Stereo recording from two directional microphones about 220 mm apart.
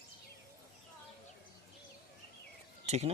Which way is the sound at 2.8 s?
30° right (ahead or behind).